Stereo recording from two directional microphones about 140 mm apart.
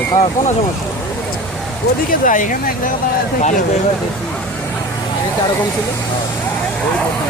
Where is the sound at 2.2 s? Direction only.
70° left (ahead or behind).